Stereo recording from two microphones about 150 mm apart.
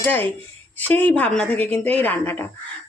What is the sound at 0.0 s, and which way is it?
Speech, 15° left (ahead or behind).